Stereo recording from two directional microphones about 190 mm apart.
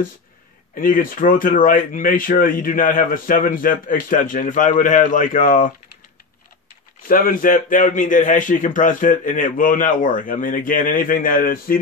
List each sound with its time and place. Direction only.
0.7 s speech: 45° left (ahead or behind)
7.1 s speech: 45° left (ahead or behind)